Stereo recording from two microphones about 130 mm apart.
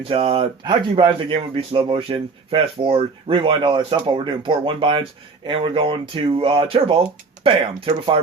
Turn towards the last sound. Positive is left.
turn(degrees=-45)  # may be behind; listen again after turning